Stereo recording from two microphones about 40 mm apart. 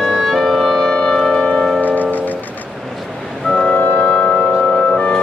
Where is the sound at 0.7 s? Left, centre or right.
Left.